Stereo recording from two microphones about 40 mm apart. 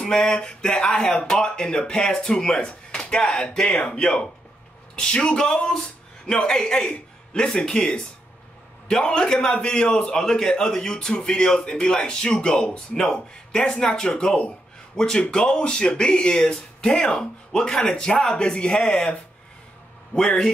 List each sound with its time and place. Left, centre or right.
0.0 s a man's voice: left
20.1 s a man's voice: left